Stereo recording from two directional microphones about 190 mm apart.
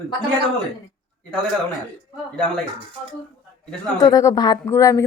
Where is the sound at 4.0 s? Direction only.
20° left (ahead or behind).